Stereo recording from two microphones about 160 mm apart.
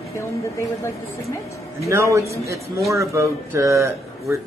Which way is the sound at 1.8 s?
20° right (ahead or behind).